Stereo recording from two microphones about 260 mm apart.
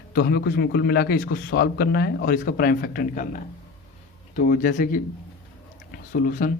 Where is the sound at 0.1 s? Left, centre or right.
Left.